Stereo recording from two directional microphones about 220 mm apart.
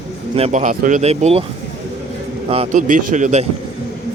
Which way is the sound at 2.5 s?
25° right (ahead or behind).